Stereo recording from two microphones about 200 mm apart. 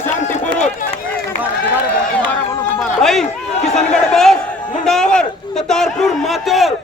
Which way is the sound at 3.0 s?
Centre (ahead or behind).